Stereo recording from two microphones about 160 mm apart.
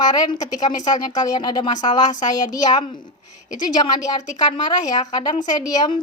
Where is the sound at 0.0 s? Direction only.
25° left (ahead or behind).